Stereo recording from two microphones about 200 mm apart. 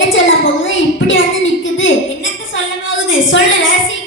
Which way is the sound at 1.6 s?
70° left (ahead or behind).